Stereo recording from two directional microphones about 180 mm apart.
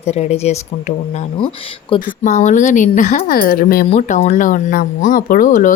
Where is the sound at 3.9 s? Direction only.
40° left (ahead or behind).